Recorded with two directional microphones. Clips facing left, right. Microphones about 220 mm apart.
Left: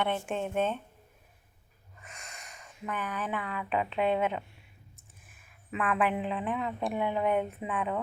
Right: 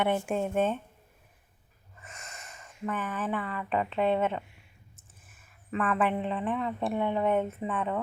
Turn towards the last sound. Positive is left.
turn(degrees=0)  # may be behind; listen again after turning